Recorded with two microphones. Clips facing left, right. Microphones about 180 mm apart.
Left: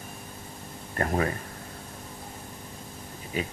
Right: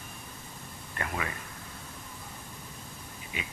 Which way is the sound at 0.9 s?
40° left (ahead or behind).